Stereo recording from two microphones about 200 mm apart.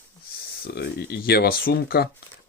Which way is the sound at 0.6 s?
55° left (ahead or behind).